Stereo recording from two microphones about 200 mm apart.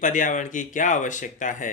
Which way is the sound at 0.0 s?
40° left (ahead or behind).